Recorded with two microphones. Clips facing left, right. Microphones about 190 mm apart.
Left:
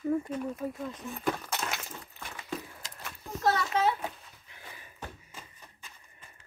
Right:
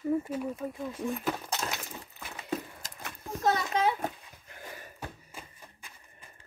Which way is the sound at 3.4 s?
15° right (ahead or behind).